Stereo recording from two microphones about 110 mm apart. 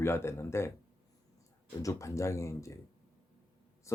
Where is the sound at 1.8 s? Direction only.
30° left (ahead or behind).